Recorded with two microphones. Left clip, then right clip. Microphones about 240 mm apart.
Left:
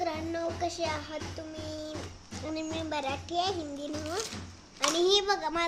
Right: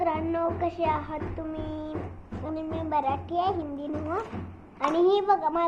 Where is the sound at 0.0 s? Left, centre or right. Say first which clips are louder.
Right 6 dB; centre.